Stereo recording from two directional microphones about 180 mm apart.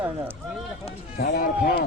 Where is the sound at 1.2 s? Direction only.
55° left (ahead or behind).